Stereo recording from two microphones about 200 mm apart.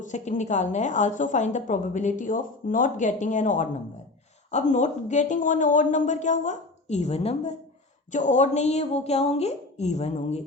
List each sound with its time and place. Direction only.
0.0 s a woman's voice: 35° left (ahead or behind)